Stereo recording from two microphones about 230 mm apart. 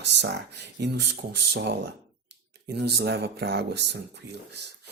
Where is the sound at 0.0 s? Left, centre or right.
Right.